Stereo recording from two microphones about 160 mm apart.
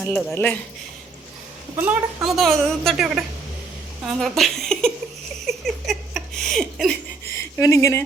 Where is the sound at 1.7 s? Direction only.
15° right (ahead or behind).